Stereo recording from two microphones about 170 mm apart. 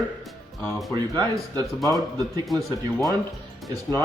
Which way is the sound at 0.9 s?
25° right (ahead or behind).